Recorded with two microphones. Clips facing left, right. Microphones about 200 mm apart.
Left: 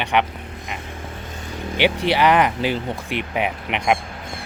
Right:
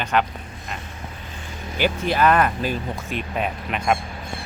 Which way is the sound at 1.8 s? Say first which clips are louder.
Left 3 dB; 80° left.